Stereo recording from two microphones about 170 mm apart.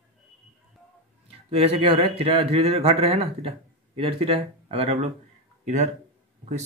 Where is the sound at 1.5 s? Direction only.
35° right (ahead or behind).